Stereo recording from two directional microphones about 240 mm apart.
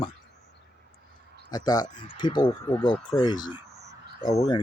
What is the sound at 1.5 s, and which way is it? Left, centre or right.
Speech, centre.